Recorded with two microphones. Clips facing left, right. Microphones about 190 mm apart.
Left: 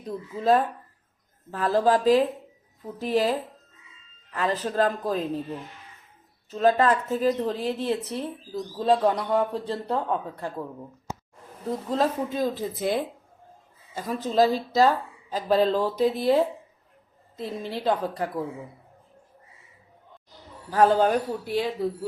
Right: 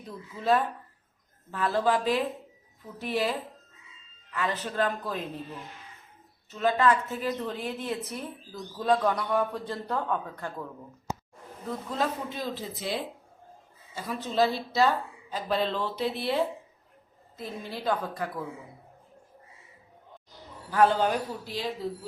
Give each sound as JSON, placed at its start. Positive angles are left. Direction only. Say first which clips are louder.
{"t": 0.3, "sound": "a woman's voice", "louder": "left 4 dB", "side_deg": 40}
{"t": 6.5, "sound": "a woman's voice", "louder": "left 4 dB", "side_deg": 35}
{"t": 11.9, "sound": "a woman's voice", "louder": "left 6 dB", "side_deg": 40}
{"t": 17.7, "sound": "a woman's voice", "louder": "left 4 dB", "side_deg": 35}
{"t": 20.7, "sound": "a man's voice", "louder": "left 3 dB", "side_deg": 40}